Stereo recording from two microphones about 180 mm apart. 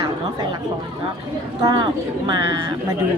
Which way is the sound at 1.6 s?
20° right (ahead or behind).